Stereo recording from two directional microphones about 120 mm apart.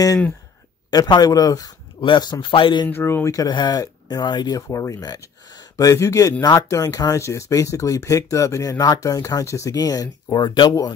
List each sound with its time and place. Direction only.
0.8 s speech: 35° left (ahead or behind)
2.9 s speech: 20° left (ahead or behind); by 10.7 s 40° left (ahead or behind)